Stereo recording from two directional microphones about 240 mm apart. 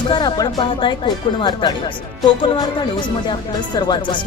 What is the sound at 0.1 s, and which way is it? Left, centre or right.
Speech, centre.